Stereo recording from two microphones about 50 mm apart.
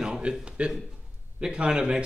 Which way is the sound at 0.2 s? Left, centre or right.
Right.